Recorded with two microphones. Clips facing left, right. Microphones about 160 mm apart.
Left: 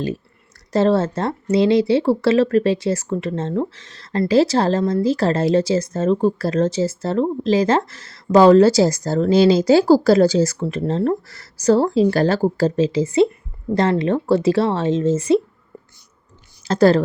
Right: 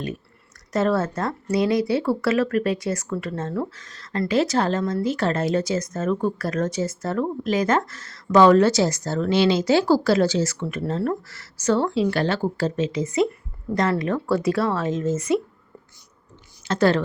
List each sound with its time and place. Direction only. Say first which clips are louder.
0.7 s a woman's voice: left 5 dB; 30° left (ahead or behind)
16.6 s a woman's voice: left 5 dB; 35° left (ahead or behind)